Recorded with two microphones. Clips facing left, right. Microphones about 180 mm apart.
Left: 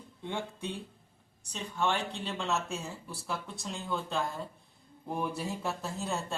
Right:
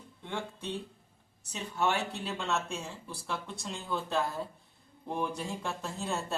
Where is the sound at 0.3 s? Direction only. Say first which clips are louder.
Left 1 dB; 15° left (ahead or behind).